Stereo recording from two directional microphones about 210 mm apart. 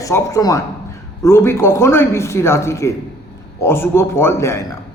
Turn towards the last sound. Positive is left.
turn(degrees=15)  # may be behind; listen again after turning